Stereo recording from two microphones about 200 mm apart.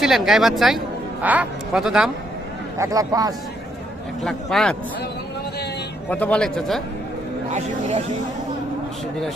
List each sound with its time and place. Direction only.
0.0 s a man's voice: centre (ahead or behind)
2.7 s a man's voice: 15° right (ahead or behind)
4.2 s a man's voice: centre (ahead or behind)
6.1 s a man's voice: 10° left (ahead or behind)
7.5 s speech: 35° right (ahead or behind)